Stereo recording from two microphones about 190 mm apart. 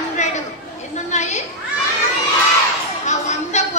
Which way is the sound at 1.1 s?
40° left (ahead or behind).